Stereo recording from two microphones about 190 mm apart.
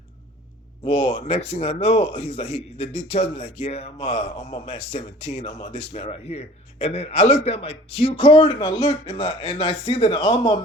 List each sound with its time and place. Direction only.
0.9 s a man's voice: 30° left (ahead or behind)